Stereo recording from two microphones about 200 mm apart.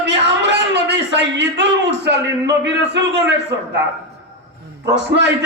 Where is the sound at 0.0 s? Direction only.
60° right (ahead or behind).